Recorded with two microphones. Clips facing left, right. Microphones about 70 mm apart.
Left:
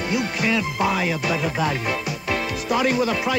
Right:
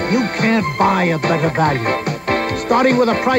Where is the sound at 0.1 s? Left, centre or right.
Right.